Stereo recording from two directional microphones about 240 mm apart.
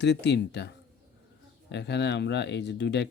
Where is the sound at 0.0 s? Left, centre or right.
Left.